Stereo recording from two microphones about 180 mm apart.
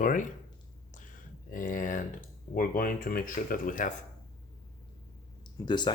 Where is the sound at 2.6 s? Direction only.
50° left (ahead or behind).